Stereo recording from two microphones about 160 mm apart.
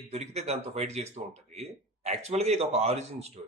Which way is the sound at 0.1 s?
40° right (ahead or behind).